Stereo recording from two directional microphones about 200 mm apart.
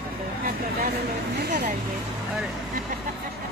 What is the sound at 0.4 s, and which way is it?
Speech, 45° right (ahead or behind).